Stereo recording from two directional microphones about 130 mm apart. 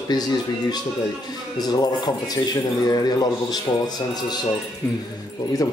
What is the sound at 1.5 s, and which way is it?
Speech, 30° left (ahead or behind).